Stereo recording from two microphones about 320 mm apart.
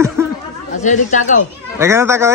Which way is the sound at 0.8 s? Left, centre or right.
Left.